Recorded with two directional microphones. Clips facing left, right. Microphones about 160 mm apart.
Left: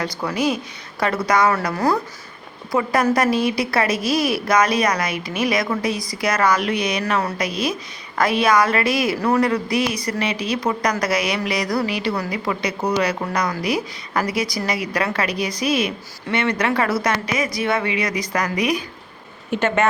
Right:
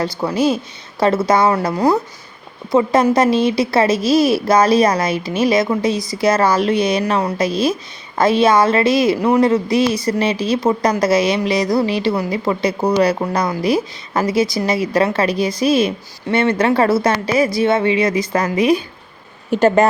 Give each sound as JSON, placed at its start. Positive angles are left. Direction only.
{"t": 0.0, "sound": "a woman's voice", "side_deg": -25}
{"t": 19.5, "sound": "speech", "side_deg": -40}